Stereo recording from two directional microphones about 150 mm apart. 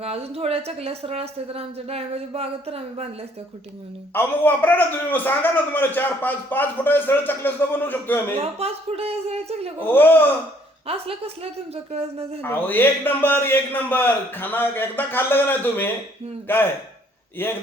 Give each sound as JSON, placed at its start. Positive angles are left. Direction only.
{"t": 0.0, "sound": "a woman's voice", "side_deg": -45}
{"t": 4.1, "sound": "a man's voice", "side_deg": 15}
{"t": 8.4, "sound": "a man's voice", "side_deg": -40}
{"t": 9.8, "sound": "a man's voice", "side_deg": 15}
{"t": 10.8, "sound": "a woman's voice", "side_deg": -40}
{"t": 12.4, "sound": "a man's voice", "side_deg": 15}